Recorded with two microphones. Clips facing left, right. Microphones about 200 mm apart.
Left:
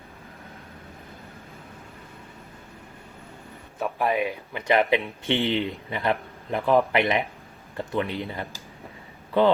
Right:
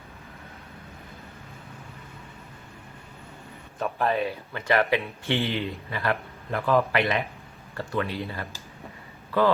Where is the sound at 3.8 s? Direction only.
10° left (ahead or behind).